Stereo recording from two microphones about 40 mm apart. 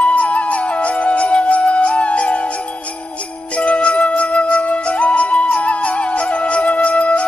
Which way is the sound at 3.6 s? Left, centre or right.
Left.